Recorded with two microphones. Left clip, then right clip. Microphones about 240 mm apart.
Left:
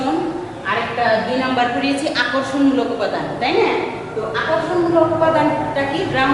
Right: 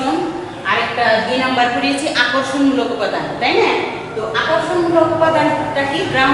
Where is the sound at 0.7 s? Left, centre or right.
Centre.